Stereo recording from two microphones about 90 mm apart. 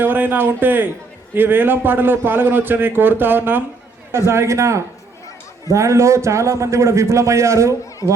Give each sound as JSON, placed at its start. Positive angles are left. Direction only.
{"t": 0.0, "sound": "a man's voice", "side_deg": -20}